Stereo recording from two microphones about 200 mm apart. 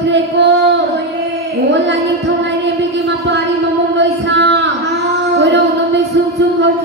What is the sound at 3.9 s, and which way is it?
Speech, 55° right (ahead or behind).